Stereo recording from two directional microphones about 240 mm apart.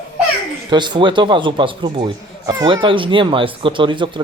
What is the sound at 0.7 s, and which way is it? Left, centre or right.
Speech, centre.